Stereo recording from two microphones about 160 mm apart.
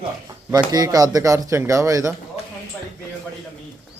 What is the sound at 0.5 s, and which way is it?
Speech, 25° right (ahead or behind).